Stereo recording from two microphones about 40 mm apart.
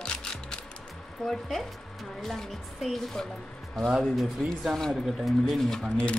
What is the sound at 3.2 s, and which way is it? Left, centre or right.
Speech, centre.